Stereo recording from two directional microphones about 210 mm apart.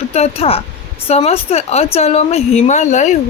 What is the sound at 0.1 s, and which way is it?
Speech, 30° left (ahead or behind).